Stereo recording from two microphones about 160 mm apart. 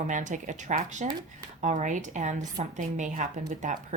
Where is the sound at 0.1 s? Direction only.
50° right (ahead or behind).